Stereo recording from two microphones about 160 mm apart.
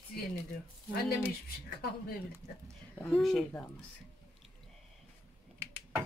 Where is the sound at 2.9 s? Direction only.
10° left (ahead or behind).